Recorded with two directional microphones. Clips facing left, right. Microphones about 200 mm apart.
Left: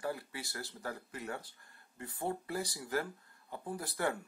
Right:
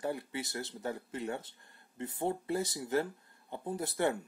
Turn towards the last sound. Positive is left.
turn(degrees=-25)  # may be behind; listen again after turning